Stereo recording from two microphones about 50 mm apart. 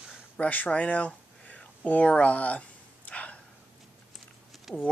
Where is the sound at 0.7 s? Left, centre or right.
Left.